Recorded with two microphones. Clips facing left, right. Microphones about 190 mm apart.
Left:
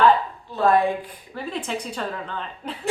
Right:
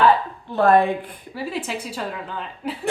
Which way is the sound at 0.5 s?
55° right (ahead or behind).